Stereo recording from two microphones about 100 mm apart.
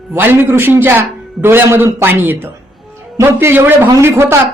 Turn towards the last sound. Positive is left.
turn(degrees=-25)  # may be behind; listen again after turning